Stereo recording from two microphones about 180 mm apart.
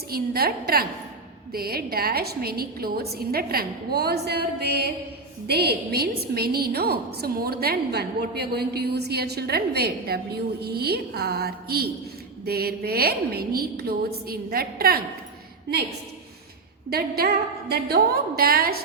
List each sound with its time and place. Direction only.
0.1 s a woman's voice: 60° right (ahead or behind)
16.9 s a woman's voice: 60° right (ahead or behind)